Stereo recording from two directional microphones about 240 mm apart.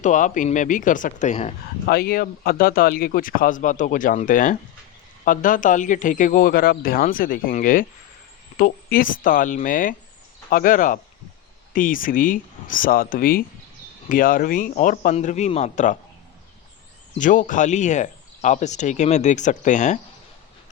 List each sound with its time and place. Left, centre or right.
0.0 s speech: left
1.9 s speech: left
17.2 s speech: left